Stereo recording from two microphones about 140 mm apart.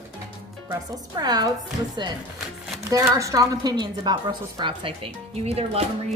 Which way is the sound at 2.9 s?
25° right (ahead or behind).